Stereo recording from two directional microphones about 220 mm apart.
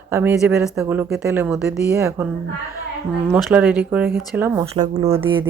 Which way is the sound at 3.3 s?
5° right (ahead or behind).